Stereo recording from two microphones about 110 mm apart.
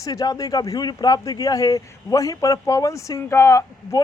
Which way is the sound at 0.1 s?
30° left (ahead or behind).